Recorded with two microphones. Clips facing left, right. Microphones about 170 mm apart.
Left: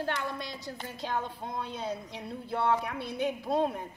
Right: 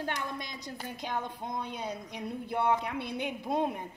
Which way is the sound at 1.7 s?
15° right (ahead or behind).